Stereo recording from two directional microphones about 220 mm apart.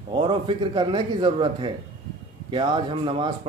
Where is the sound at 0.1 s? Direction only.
20° right (ahead or behind).